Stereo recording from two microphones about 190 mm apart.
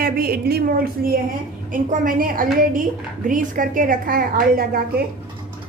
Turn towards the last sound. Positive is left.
turn(degrees=-50)  # may be behind; listen again after turning